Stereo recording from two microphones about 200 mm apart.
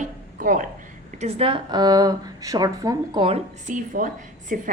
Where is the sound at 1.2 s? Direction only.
25° right (ahead or behind).